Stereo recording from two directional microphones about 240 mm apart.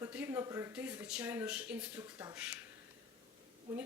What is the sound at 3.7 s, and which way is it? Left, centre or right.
Speech, centre.